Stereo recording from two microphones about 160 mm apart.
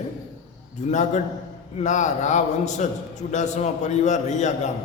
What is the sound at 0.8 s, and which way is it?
A man's voice, 50° left (ahead or behind).